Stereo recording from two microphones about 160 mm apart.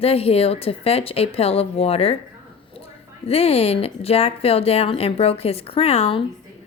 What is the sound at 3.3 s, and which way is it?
Speech, 40° left (ahead or behind).